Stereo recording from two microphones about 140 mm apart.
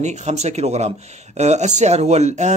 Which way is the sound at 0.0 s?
55° right (ahead or behind).